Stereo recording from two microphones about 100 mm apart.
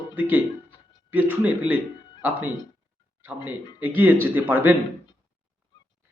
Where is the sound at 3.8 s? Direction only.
20° right (ahead or behind).